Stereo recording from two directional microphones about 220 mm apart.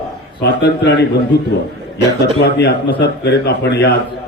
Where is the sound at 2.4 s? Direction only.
50° left (ahead or behind).